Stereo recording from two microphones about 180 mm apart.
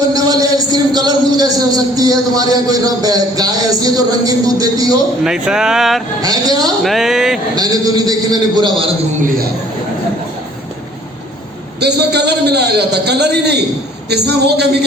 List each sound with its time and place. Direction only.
0.1 s a sound: 20° right (ahead or behind)
0.9 s a man's voice: 25° right (ahead or behind)
5.2 s speech: 5° right (ahead or behind)
6.2 s a man's voice: 20° right (ahead or behind)
6.8 s speech: centre (ahead or behind)
7.5 s a man's voice: 20° right (ahead or behind)
9.2 s speech: 55° right (ahead or behind)
11.8 s a man's voice: 65° right (ahead or behind)